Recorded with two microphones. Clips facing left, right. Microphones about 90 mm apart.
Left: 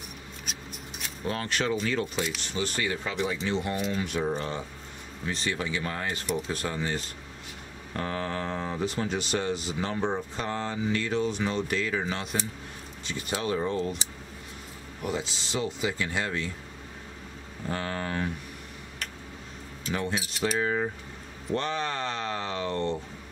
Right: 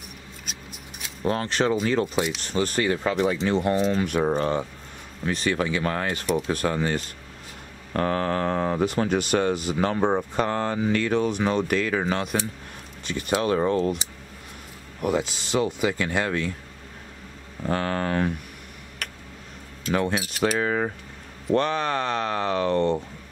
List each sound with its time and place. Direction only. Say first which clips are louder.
0.5 s scissors: left 1 dB; 5° right (ahead or behind)
1.2 s speech: right 6 dB; 35° right (ahead or behind); by 13.8 s 60° right (ahead or behind)
15.0 s speech: right 7 dB; 55° right (ahead or behind)
17.6 s speech: right 7 dB; 65° right (ahead or behind)
19.0 s a sound: right 3 dB; 60° right (ahead or behind)
19.8 s speech: right 6 dB; 70° right (ahead or behind)